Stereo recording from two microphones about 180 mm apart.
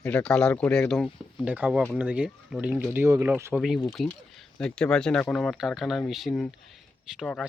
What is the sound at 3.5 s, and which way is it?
Speech, centre (ahead or behind).